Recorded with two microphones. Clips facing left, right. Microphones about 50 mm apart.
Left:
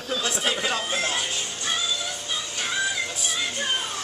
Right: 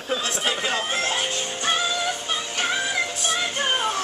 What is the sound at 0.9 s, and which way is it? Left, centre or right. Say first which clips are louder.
Music: right 2 dB; right.